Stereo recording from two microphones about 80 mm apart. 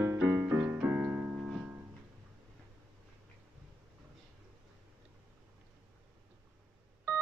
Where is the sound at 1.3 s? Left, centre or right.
Centre.